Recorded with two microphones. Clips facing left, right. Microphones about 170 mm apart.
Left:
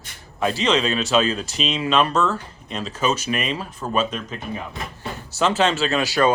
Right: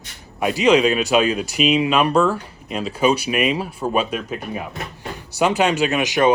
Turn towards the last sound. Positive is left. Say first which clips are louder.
# right 2 dB
turn(degrees=-20)  # may be behind; listen again after turning